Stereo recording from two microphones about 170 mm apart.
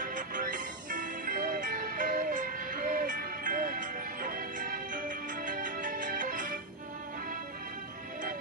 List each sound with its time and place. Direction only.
0.0 s music: 50° right (ahead or behind)